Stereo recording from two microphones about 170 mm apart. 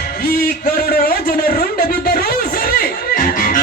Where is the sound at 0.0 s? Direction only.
60° left (ahead or behind).